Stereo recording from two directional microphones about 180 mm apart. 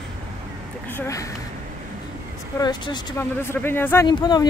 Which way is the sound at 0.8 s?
15° left (ahead or behind).